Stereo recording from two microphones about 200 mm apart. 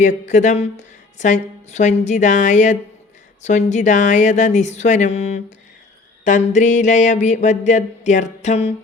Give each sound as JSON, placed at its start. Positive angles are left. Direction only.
{"t": 0.0, "sound": "speech", "side_deg": 35}